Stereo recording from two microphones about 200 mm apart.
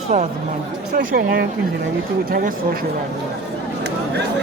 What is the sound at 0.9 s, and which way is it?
Speech, 50° right (ahead or behind).